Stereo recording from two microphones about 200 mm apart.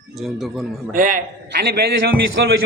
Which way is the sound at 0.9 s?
40° right (ahead or behind).